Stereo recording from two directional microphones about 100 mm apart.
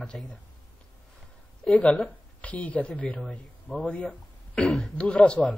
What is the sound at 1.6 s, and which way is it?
A woman's voice, 10° left (ahead or behind).